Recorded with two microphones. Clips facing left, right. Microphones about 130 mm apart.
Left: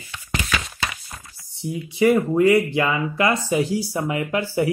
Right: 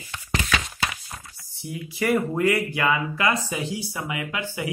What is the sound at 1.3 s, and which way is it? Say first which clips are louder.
Typing: left 7 dB; centre (ahead or behind).